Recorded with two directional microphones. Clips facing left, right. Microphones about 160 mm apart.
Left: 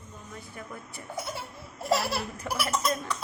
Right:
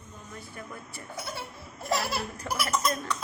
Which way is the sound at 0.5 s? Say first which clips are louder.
Left 1 dB; 20° left (ahead or behind).